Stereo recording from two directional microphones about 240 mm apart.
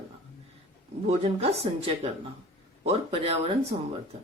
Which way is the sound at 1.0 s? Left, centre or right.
Right.